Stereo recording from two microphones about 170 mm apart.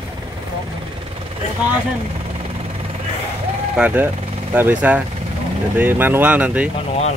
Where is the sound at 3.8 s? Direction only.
5° right (ahead or behind).